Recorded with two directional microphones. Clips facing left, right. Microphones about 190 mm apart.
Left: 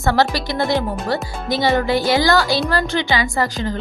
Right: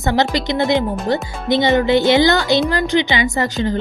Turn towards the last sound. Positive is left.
turn(degrees=-25)  # may be behind; listen again after turning